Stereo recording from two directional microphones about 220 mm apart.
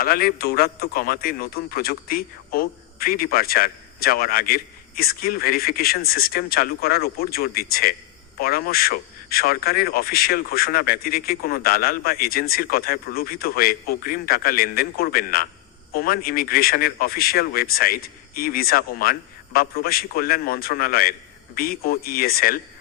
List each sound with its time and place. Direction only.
0.0 s a man's voice: 40° left (ahead or behind)